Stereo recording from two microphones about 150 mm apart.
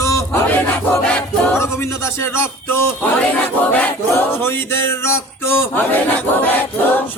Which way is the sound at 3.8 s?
15° left (ahead or behind).